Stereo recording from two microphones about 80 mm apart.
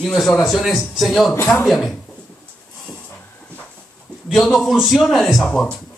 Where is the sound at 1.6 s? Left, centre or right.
Centre.